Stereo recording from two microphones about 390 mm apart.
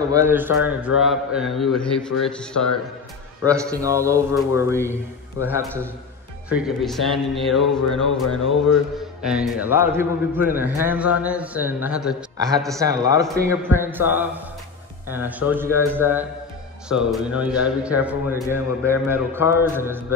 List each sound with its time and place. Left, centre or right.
0.1 s a man's voice: centre
9.2 s a man's voice: centre